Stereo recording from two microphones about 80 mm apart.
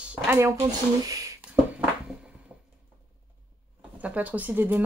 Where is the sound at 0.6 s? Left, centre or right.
Right.